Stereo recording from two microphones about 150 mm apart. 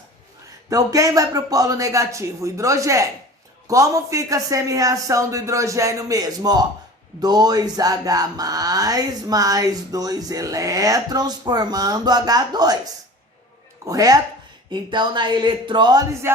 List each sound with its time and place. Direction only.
0.7 s speech: 25° right (ahead or behind)
16.2 s music: 15° right (ahead or behind)